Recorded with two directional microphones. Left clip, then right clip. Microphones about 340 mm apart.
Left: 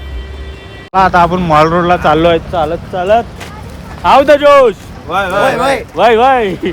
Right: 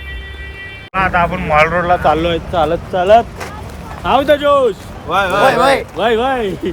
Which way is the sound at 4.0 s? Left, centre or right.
Centre.